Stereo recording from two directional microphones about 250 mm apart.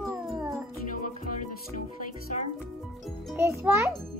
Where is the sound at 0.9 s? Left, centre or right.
Left.